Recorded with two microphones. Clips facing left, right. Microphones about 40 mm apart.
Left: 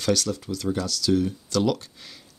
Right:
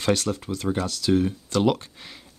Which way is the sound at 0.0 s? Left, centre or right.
Right.